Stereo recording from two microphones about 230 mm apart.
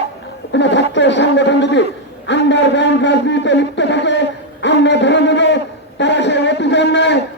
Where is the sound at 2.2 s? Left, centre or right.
Left.